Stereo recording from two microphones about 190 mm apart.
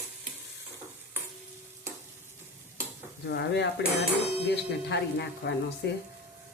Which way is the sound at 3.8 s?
65° left (ahead or behind).